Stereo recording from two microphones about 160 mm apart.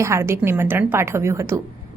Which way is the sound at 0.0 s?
15° right (ahead or behind).